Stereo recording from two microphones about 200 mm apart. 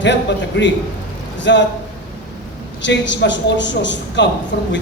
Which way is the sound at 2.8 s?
60° left (ahead or behind).